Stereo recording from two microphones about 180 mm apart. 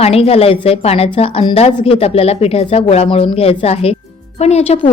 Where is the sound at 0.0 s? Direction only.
35° left (ahead or behind).